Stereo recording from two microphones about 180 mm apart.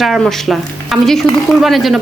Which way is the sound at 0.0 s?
Centre (ahead or behind).